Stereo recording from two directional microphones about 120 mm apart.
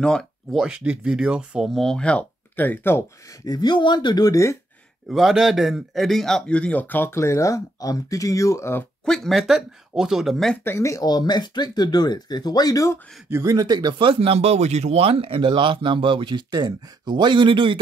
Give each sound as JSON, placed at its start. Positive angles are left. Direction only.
{"t": 0.0, "sound": "speech", "side_deg": 5}
{"t": 3.4, "sound": "speech", "side_deg": 35}
{"t": 5.1, "sound": "a man's voice", "side_deg": -5}
{"t": 9.0, "sound": "speech", "side_deg": 5}
{"t": 10.6, "sound": "speech", "side_deg": 20}
{"t": 13.3, "sound": "speech", "side_deg": -25}